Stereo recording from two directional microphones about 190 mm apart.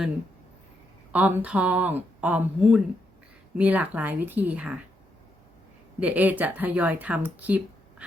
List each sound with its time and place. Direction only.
1.1 s speech: 10° right (ahead or behind)
6.0 s speech: 10° right (ahead or behind)
7.3 s a sound: 10° right (ahead or behind)